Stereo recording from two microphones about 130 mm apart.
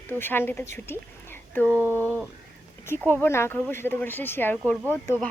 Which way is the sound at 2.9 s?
15° left (ahead or behind).